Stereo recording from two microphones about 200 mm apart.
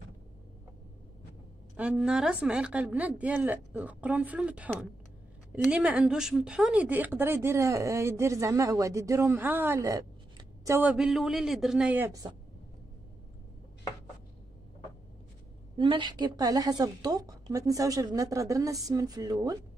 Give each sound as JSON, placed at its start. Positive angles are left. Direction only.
{"t": 1.8, "sound": "speech", "side_deg": -5}
{"t": 15.8, "sound": "a woman's voice", "side_deg": -25}